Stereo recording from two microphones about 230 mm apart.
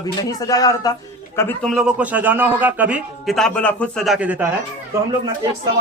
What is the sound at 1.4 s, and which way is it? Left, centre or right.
A man's voice, centre.